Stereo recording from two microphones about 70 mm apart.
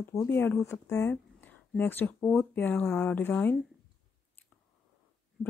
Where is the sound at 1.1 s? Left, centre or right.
Left.